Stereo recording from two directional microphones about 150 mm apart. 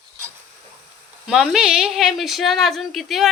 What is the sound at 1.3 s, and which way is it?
Speech, 5° right (ahead or behind).